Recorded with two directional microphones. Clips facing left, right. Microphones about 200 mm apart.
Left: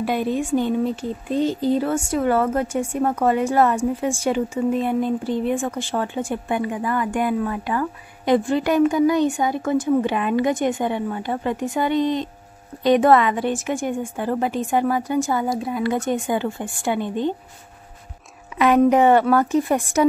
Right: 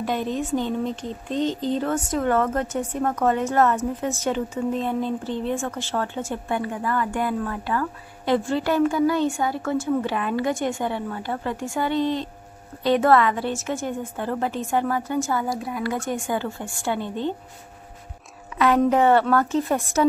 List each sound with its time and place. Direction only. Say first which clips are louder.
0.0 s speech: left 3 dB; 10° left (ahead or behind)
18.6 s speech: left 3 dB; 15° left (ahead or behind)